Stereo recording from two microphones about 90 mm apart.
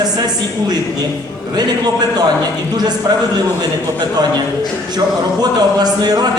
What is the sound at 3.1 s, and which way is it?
Speech, 45° right (ahead or behind).